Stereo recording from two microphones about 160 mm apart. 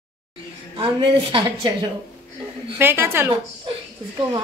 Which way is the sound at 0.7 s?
35° right (ahead or behind).